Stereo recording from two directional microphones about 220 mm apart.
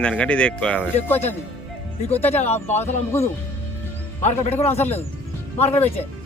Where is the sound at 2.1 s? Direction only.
30° left (ahead or behind).